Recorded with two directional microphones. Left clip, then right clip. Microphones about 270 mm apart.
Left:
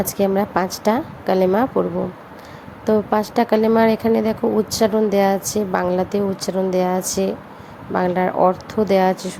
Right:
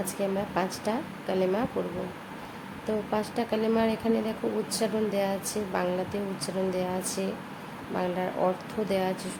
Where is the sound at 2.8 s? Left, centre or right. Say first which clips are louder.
Left 12 dB; left.